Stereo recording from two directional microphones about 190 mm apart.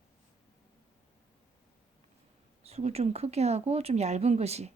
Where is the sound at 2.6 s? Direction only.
35° right (ahead or behind).